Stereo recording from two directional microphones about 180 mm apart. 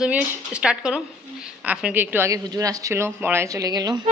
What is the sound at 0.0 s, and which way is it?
A woman's voice, 5° right (ahead or behind).